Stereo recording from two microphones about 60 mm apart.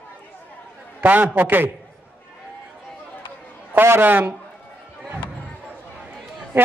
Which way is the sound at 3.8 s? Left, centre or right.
Right.